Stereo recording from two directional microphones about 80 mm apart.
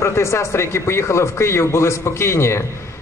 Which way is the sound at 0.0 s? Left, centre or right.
Left.